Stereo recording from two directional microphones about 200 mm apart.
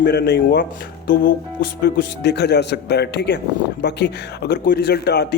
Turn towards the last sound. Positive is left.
turn(degrees=55)  # may be behind; listen again after turning